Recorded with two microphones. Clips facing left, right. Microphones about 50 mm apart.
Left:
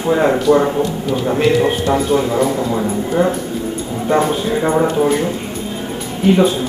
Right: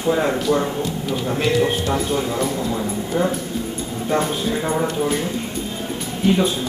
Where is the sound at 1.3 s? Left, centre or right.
Centre.